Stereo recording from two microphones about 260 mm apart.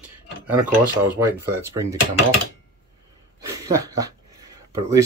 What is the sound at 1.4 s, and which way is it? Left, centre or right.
Speech, centre.